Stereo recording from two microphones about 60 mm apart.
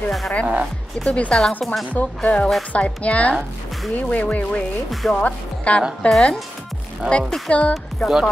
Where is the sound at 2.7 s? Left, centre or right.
Left.